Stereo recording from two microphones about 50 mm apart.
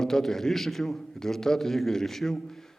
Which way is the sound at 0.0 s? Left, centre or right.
Centre.